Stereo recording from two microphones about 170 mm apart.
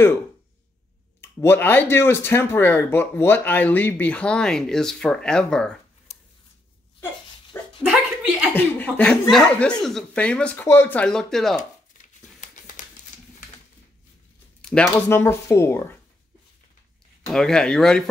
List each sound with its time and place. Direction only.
1.2 s speech: 15° left (ahead or behind)
7.8 s chuckle: 5° right (ahead or behind)
8.5 s speech: 10° left (ahead or behind)
12.0 s a sound: 50° left (ahead or behind)
14.6 s a sound: 5° left (ahead or behind)
14.9 s speech: 15° left (ahead or behind)
17.3 s speech: 5° left (ahead or behind)